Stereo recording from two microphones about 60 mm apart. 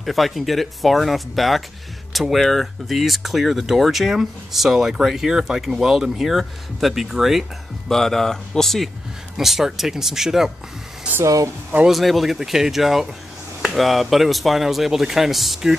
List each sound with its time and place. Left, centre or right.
0.0 s speech: centre
7.9 s speech: centre
11.2 s speech: right
11.9 s speech: centre